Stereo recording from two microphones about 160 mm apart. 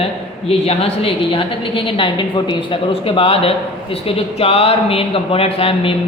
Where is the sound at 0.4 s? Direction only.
40° left (ahead or behind).